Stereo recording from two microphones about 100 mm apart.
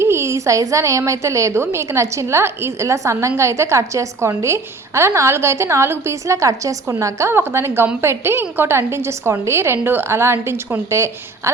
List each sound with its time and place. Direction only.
0.0 s a woman's voice: 25° right (ahead or behind)